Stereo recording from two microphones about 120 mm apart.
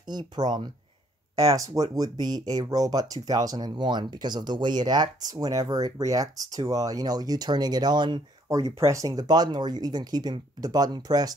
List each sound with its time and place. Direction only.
0.0 s speech: 35° right (ahead or behind)
8.5 s speech: 25° right (ahead or behind)